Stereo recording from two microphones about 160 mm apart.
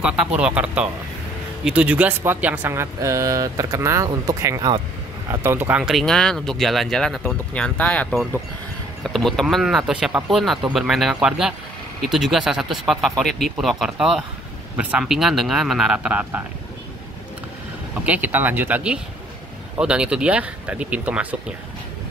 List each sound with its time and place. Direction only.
0.0 s speech: 5° right (ahead or behind)
18.0 s speech: 10° right (ahead or behind)